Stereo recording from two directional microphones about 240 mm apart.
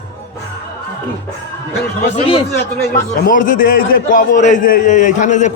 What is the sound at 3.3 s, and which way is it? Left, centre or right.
A man's voice, left.